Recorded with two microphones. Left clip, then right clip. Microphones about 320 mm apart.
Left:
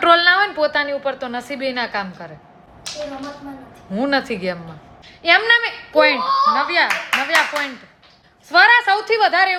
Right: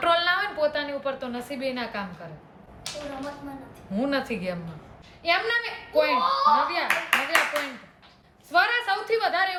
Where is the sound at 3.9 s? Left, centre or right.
Centre.